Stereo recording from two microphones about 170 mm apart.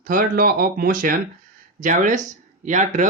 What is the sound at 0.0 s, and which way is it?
Speech, 55° right (ahead or behind).